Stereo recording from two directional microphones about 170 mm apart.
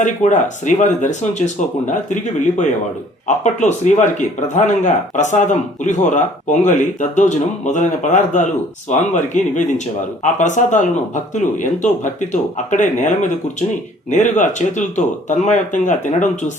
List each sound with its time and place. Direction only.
0.0 s speech: 45° left (ahead or behind)